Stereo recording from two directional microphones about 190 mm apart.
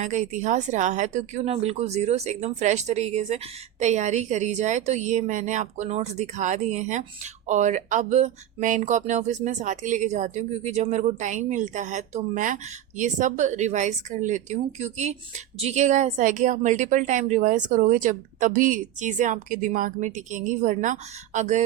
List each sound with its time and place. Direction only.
0.0 s speech: 40° right (ahead or behind)